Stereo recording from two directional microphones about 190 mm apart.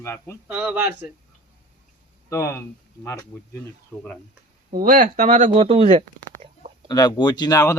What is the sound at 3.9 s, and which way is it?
Speech, 5° left (ahead or behind).